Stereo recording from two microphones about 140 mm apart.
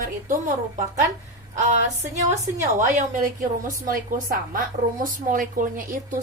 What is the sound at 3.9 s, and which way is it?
A woman's voice, 75° right (ahead or behind).